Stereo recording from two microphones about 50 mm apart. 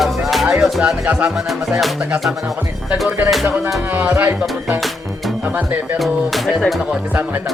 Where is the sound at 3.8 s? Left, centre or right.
Right.